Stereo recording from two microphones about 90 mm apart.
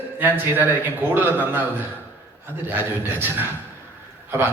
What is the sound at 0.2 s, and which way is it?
A man's voice, 20° right (ahead or behind).